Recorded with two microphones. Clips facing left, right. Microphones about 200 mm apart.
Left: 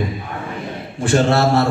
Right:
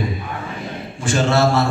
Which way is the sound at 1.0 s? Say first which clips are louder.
Left 2 dB; 60° left (ahead or behind).